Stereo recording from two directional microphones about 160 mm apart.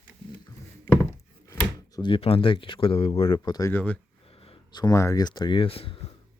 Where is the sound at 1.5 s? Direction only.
25° left (ahead or behind).